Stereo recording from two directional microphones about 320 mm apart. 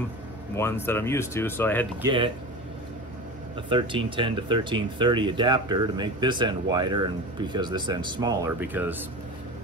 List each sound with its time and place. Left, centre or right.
0.6 s speech: centre
2.0 s speech: centre
3.6 s speech: centre